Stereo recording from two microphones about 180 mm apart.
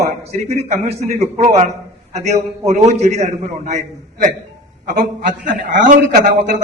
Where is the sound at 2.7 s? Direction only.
40° right (ahead or behind).